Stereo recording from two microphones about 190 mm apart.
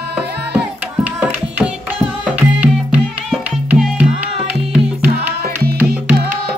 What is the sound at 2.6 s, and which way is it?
Music, 10° right (ahead or behind).